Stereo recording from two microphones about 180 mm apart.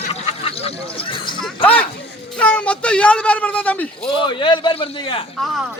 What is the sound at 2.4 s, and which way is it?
A man's voice, 5° left (ahead or behind).